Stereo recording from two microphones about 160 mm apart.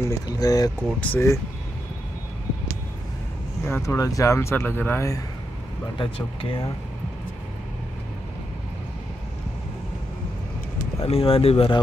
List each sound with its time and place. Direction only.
0.1 s speech: 25° left (ahead or behind)
3.6 s speech: 15° left (ahead or behind)
5.9 s speech: 35° left (ahead or behind)
11.0 s speech: 40° left (ahead or behind)